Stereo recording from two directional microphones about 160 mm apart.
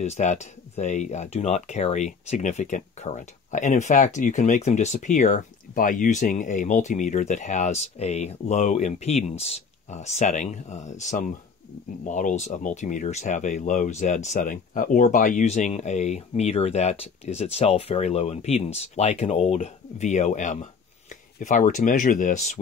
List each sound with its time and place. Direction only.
0.0 s speech: 45° left (ahead or behind)